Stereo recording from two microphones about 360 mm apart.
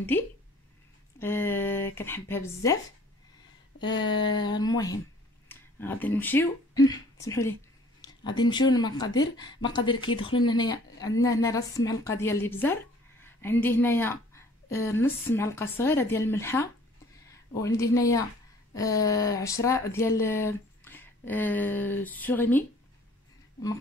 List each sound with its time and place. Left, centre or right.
0.1 s speech: centre
3.8 s speech: centre